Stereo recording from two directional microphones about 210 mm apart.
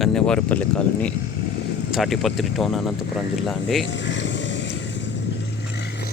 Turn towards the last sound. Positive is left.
turn(degrees=60)  # may be behind; listen again after turning